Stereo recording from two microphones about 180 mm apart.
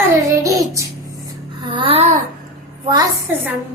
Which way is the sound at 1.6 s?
25° right (ahead or behind).